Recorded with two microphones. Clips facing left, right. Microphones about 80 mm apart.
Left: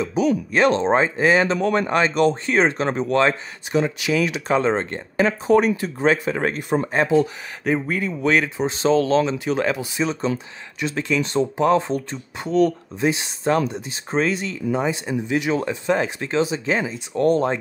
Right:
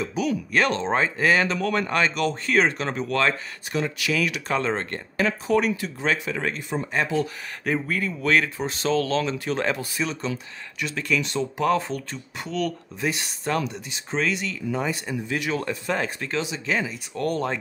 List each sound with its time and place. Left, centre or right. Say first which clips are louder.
0.0 s speech: left 5 dB; left
5.5 s speech: left 7 dB; left
7.6 s speech: left 4 dB; centre
9.9 s speech: left 5 dB; left
16.3 s speech: left 6 dB; left